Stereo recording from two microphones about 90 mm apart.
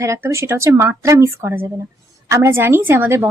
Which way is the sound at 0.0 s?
30° right (ahead or behind).